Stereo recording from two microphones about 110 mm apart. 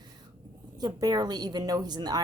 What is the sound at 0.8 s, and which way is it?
A woman's voice, 35° right (ahead or behind).